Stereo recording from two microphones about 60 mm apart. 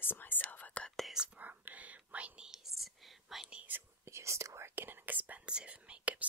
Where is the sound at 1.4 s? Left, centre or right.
Right.